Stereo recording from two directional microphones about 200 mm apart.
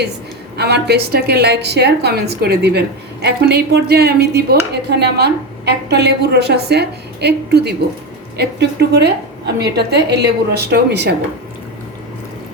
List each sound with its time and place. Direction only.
0.5 s a woman's voice: 55° right (ahead or behind)